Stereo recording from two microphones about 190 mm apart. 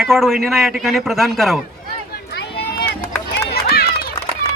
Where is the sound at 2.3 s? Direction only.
60° left (ahead or behind).